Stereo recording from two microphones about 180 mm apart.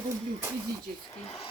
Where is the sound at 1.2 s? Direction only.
35° left (ahead or behind).